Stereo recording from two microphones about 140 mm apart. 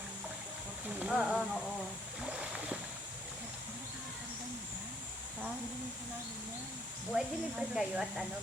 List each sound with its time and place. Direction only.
0.9 s a sound: 5° right (ahead or behind)
2.2 s boat: 5° right (ahead or behind)
7.1 s speech: 5° right (ahead or behind)